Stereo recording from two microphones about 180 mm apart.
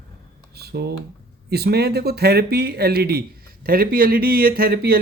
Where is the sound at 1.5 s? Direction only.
60° right (ahead or behind).